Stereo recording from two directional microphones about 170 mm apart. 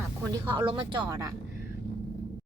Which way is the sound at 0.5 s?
30° right (ahead or behind).